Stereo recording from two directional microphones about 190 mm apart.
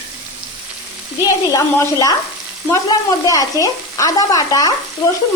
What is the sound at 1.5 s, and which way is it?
Speech, 15° left (ahead or behind).